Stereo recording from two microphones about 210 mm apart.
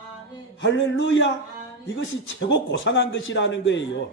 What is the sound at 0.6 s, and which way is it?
Speech, 60° left (ahead or behind).